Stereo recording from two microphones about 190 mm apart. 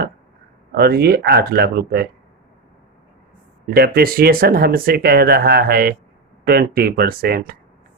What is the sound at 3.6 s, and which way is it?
Speech, 55° right (ahead or behind).